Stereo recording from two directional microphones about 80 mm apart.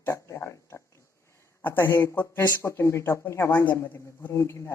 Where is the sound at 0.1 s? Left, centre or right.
Left.